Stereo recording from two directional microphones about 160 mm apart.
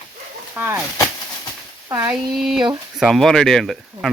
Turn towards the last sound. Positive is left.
turn(degrees=0)  # may be behind; listen again after turning